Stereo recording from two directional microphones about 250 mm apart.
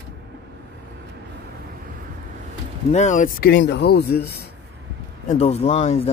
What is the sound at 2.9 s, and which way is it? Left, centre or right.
A man's voice, left.